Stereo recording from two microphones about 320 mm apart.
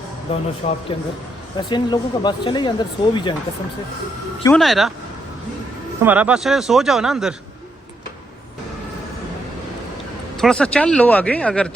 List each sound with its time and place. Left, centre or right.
0.3 s a man's voice: centre
4.4 s speech: centre
6.0 s speech: centre
10.3 s speech: centre